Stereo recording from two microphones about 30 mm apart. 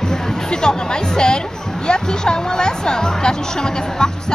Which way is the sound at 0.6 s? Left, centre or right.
Left.